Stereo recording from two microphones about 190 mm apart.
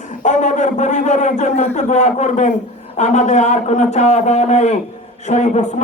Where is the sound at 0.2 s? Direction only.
40° left (ahead or behind).